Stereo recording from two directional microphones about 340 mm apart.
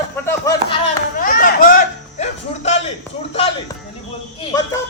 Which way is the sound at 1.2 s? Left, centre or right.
Left.